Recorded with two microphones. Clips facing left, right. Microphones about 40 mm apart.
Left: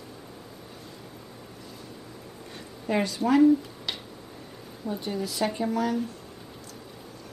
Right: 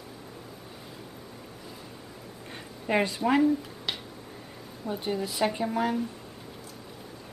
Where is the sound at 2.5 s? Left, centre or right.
Right.